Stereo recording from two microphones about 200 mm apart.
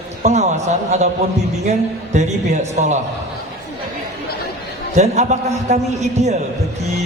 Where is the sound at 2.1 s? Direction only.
35° right (ahead or behind).